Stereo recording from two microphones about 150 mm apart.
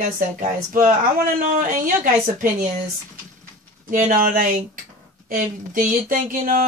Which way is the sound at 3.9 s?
70° right (ahead or behind).